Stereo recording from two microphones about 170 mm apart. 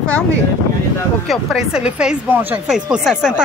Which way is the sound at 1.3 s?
Centre (ahead or behind).